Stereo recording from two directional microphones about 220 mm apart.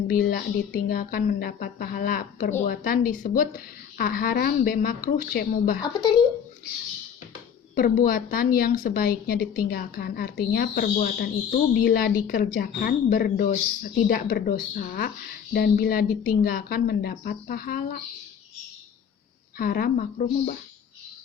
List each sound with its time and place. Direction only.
0.1 s speech: 40° left (ahead or behind)
5.8 s a woman's voice: 20° left (ahead or behind)
7.8 s a woman's voice: 40° left (ahead or behind)
19.5 s a woman's voice: 45° left (ahead or behind)